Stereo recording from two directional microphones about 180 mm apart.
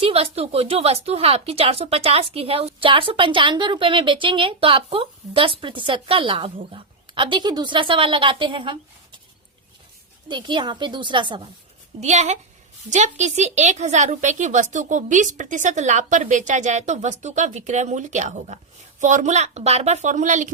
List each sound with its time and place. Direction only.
0.0 s speech: 35° right (ahead or behind)
10.2 s speech: 25° right (ahead or behind)
11.9 s a woman's voice: 40° right (ahead or behind)